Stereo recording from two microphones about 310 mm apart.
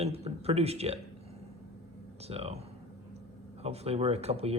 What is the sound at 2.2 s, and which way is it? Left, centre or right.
Speech, centre.